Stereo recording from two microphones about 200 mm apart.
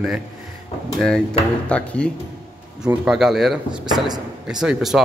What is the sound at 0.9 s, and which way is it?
Speech, 5° left (ahead or behind).